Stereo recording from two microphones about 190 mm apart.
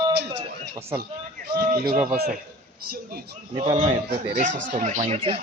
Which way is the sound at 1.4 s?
55° right (ahead or behind).